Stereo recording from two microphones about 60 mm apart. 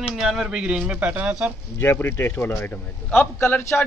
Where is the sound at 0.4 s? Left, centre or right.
Centre.